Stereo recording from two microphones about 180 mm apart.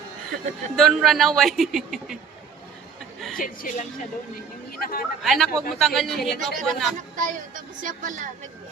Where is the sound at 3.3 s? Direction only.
50° left (ahead or behind).